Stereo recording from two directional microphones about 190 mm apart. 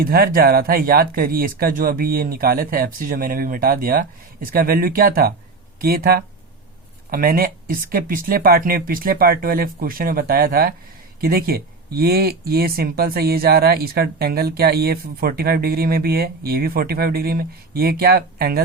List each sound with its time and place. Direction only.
0.0 s speech: 50° right (ahead or behind)